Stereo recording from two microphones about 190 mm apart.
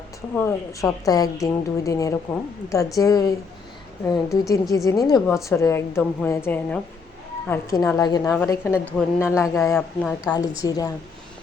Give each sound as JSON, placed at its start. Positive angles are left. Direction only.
{"t": 0.3, "sound": "a woman's voice", "side_deg": 15}
{"t": 10.6, "sound": "a woman's voice", "side_deg": 20}